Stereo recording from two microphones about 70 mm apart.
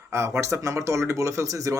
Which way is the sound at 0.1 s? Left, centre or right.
Right.